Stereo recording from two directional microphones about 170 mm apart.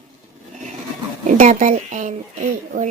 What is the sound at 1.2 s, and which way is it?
Speech, 50° right (ahead or behind).